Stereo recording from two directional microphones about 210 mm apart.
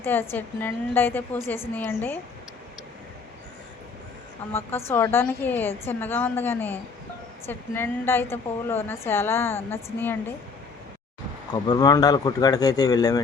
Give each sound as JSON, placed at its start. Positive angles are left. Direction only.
{"t": 0.0, "sound": "a woman's voice", "side_deg": 10}
{"t": 4.5, "sound": "a woman's voice", "side_deg": 10}
{"t": 11.5, "sound": "a woman's voice", "side_deg": 20}